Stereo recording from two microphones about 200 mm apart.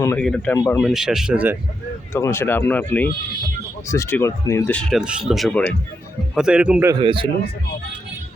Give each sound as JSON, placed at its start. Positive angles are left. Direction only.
{"t": 0.0, "sound": "speech", "side_deg": 15}
{"t": 0.9, "sound": "speech", "side_deg": 0}
{"t": 2.1, "sound": "speech", "side_deg": 15}
{"t": 7.0, "sound": "speech", "side_deg": -25}